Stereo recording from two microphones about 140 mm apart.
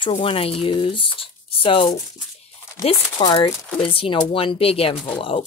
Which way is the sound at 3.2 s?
30° left (ahead or behind).